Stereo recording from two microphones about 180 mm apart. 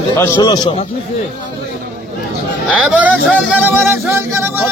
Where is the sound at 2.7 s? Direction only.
5° right (ahead or behind).